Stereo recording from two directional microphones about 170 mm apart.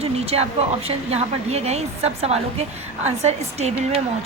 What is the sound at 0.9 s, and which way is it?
A woman's voice, 40° right (ahead or behind).